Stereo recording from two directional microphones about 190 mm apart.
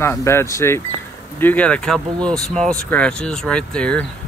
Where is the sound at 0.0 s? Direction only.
15° left (ahead or behind).